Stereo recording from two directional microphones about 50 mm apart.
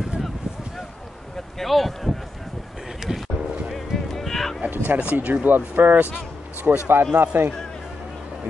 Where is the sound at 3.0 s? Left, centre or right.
Centre.